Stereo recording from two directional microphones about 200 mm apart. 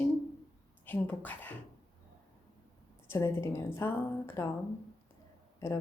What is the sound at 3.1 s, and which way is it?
A woman's voice, 10° left (ahead or behind).